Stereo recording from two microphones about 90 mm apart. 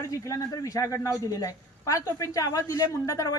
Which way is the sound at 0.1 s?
40° left (ahead or behind).